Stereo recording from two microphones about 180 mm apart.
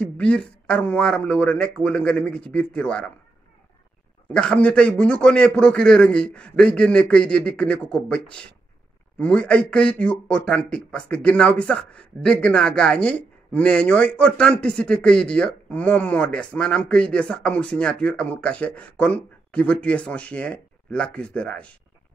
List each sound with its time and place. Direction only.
0.0 s a man's voice: 5° left (ahead or behind)
4.3 s a man's voice: 5° left (ahead or behind)